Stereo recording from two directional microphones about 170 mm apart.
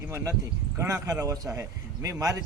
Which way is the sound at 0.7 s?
15° right (ahead or behind).